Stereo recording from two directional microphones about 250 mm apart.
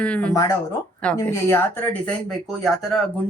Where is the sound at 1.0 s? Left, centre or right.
Centre.